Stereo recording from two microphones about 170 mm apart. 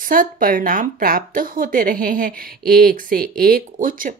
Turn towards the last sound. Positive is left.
turn(degrees=-55)  # may be behind; listen again after turning